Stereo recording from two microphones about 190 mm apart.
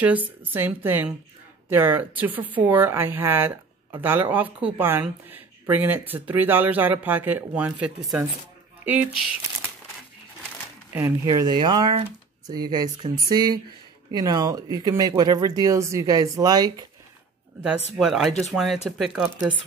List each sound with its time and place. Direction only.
0.0 s speech: 10° right (ahead or behind)
10.9 s speech: 15° right (ahead or behind)
17.9 s speech: centre (ahead or behind)